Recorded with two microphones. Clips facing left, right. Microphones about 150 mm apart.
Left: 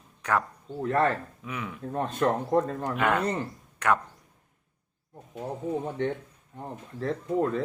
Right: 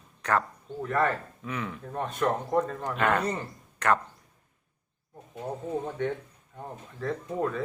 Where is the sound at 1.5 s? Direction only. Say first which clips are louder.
Right 2 dB; 10° left (ahead or behind).